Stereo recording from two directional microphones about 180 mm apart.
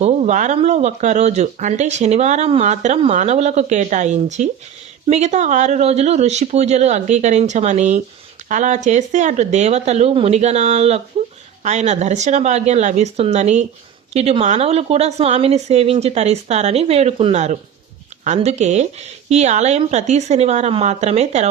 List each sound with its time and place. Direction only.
0.0 s speech: 40° right (ahead or behind)